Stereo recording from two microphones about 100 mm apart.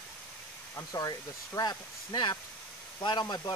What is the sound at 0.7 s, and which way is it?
A man's voice, 35° left (ahead or behind).